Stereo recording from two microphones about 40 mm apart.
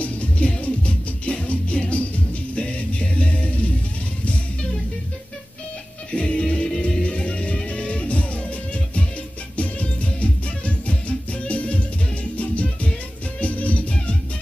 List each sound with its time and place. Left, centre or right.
0.0 s music: left
6.1 s music: left
9.6 s music: left